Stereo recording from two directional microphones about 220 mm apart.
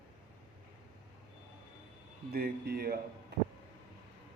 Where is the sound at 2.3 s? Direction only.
45° right (ahead or behind).